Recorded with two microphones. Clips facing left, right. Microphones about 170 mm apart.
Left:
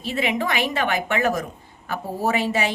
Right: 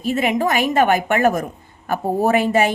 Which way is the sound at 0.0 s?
45° right (ahead or behind).